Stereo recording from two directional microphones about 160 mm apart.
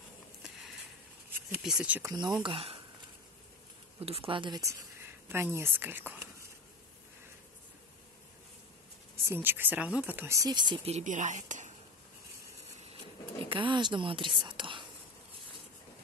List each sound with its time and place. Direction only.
1.5 s speech: 5° right (ahead or behind)
2.4 s speech: 35° right (ahead or behind)
4.0 s speech: 35° right (ahead or behind); by 6.2 s 10° right (ahead or behind)
9.3 s speech: 10° right (ahead or behind); by 10.8 s 25° right (ahead or behind)
10.9 s speech: 45° right (ahead or behind)
13.5 s a woman's voice: 30° right (ahead or behind)